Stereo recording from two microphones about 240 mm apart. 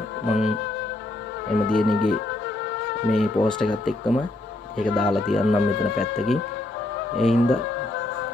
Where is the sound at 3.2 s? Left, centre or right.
Centre.